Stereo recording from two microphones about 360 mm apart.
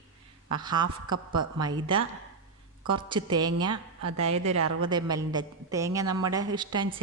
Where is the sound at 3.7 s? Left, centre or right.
Right.